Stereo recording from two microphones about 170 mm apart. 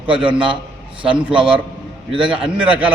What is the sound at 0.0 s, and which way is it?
A man's voice, 30° right (ahead or behind).